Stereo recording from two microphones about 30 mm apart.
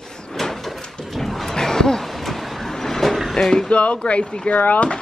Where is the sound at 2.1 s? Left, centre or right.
Centre.